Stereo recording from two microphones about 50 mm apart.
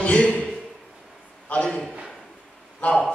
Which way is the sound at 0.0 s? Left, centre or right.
Left.